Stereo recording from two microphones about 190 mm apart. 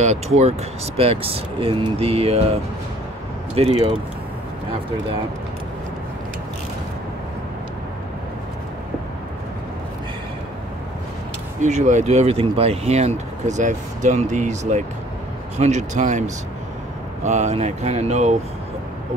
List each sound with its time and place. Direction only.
0.0 s speech: 35° right (ahead or behind)
3.5 s speech: 30° right (ahead or behind)
11.6 s speech: 40° right (ahead or behind)